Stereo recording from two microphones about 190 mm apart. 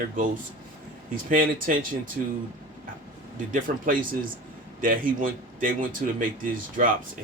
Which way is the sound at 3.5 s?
45° right (ahead or behind).